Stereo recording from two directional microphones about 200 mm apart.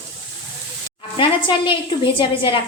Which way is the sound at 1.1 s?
25° left (ahead or behind).